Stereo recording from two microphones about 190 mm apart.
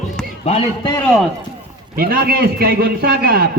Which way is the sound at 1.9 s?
55° right (ahead or behind).